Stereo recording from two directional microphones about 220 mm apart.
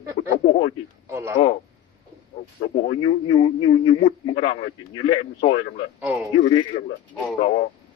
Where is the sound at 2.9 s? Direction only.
25° left (ahead or behind).